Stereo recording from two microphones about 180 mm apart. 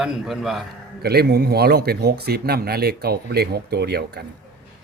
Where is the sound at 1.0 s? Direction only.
60° right (ahead or behind).